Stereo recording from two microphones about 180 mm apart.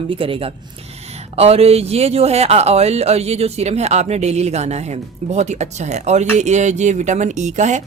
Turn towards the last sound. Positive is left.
turn(degrees=-40)  # may be behind; listen again after turning